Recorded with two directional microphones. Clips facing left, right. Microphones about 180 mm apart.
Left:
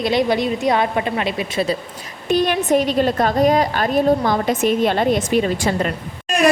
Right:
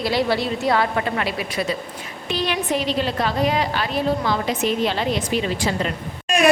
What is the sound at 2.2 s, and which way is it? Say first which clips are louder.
A woman's voice: left 6 dB; 50° left (ahead or behind).